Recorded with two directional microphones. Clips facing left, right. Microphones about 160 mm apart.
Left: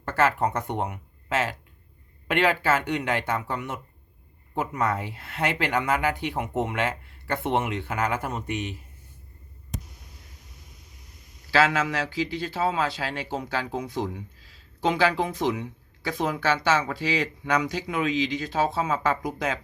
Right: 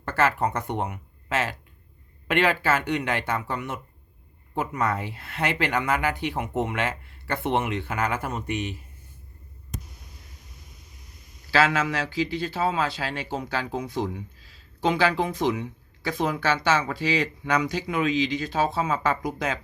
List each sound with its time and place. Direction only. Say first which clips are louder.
0.0 s speech: even; 10° left (ahead or behind)
8.4 s speech: right 1 dB; 15° right (ahead or behind)
11.5 s speech: even; 15° left (ahead or behind)